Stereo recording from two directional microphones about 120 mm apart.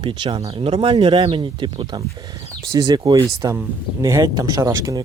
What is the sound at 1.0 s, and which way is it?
Speech, 40° right (ahead or behind).